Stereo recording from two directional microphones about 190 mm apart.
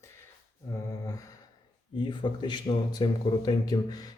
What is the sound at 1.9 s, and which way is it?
Speech, 25° left (ahead or behind).